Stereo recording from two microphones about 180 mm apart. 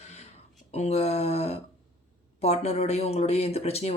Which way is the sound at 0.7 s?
35° left (ahead or behind).